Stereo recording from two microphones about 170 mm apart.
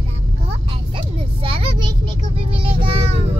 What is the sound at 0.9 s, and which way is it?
Vehicle, 30° right (ahead or behind).